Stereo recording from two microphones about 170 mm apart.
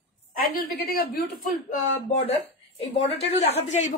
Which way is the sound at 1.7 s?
35° left (ahead or behind).